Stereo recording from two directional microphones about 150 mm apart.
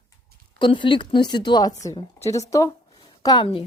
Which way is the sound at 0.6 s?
30° left (ahead or behind).